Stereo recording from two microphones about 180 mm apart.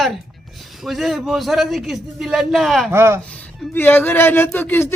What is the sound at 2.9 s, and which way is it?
Speech, 15° right (ahead or behind).